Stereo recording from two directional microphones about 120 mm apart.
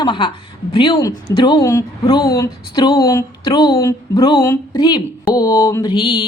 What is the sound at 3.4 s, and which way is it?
Speech, 40° left (ahead or behind).